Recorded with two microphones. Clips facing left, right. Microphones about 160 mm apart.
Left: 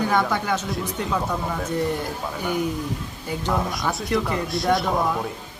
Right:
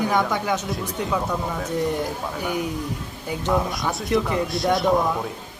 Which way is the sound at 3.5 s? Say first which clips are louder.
Right 2 dB; centre (ahead or behind).